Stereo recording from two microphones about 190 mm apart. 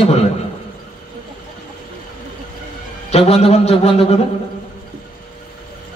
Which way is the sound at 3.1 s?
35° left (ahead or behind).